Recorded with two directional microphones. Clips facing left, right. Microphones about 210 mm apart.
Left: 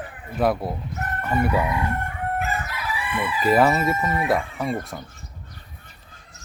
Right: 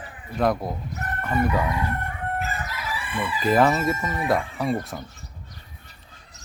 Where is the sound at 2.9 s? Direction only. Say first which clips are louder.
Left 2 dB; 55° left (ahead or behind).